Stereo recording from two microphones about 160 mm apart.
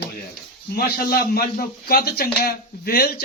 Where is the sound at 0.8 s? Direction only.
70° left (ahead or behind).